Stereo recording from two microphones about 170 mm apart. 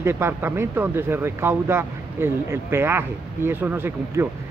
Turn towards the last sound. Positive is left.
turn(degrees=-10)  # may be behind; listen again after turning